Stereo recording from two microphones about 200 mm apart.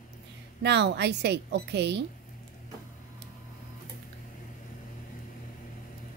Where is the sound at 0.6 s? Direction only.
60° right (ahead or behind).